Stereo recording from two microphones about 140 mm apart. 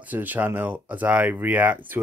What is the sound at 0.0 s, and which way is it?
Speech, 10° right (ahead or behind).